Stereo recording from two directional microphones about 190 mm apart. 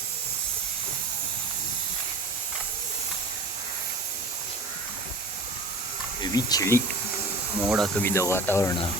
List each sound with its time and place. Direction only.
6.3 s speech: 20° left (ahead or behind)
7.6 s speech: centre (ahead or behind)
8.0 s speech: 15° left (ahead or behind)